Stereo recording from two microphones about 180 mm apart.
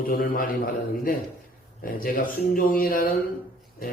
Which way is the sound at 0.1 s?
50° left (ahead or behind).